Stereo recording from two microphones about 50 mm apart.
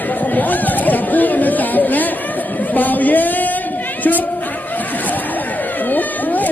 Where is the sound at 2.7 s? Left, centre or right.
Left.